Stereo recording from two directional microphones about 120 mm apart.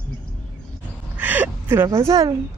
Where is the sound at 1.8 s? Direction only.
25° right (ahead or behind).